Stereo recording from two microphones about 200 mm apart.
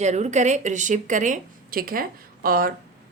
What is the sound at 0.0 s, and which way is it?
Speech, 35° right (ahead or behind).